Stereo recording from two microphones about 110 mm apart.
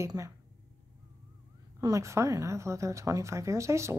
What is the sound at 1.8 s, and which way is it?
Speech, 30° right (ahead or behind).